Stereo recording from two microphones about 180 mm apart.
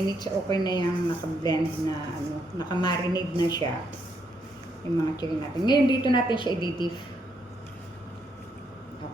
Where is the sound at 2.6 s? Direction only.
25° left (ahead or behind).